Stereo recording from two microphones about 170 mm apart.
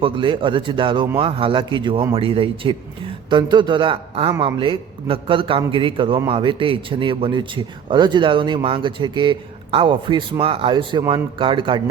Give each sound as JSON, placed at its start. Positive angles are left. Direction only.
{"t": 0.0, "sound": "speech", "side_deg": -30}